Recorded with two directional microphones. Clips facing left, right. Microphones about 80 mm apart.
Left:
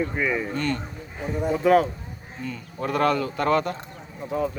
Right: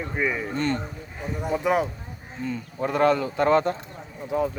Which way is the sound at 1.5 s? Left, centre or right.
Centre.